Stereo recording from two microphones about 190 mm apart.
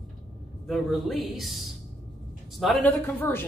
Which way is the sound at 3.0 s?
10° left (ahead or behind).